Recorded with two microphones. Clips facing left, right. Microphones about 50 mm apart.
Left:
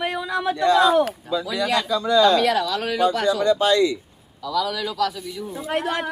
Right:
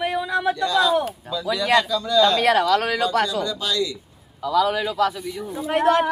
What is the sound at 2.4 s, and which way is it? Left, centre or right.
Speech, right.